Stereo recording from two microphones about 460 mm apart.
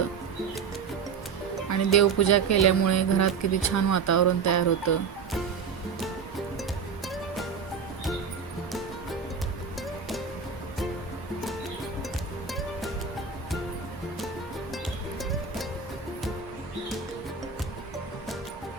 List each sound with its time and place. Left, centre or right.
1.7 s speech: left
12.5 s music: centre
15.2 s music: centre